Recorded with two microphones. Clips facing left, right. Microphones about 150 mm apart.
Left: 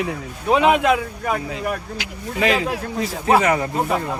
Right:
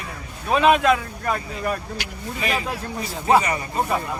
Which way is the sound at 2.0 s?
90° left.